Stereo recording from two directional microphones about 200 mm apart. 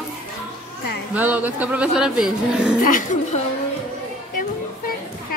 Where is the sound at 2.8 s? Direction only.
40° left (ahead or behind).